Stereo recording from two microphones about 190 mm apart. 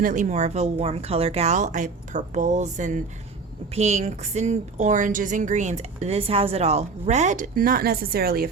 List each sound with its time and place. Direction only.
0.0 s a woman's voice: 40° right (ahead or behind)